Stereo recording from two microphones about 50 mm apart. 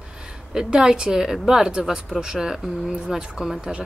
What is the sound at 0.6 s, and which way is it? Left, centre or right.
Speech, centre.